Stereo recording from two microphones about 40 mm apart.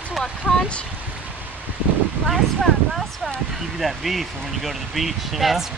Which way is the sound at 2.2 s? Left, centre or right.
Centre.